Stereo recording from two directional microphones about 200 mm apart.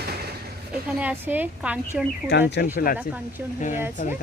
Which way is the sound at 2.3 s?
60° left (ahead or behind).